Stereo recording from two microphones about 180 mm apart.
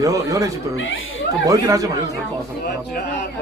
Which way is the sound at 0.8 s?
90° left.